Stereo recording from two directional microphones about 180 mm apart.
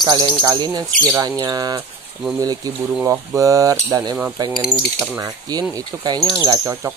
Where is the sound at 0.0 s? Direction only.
25° right (ahead or behind).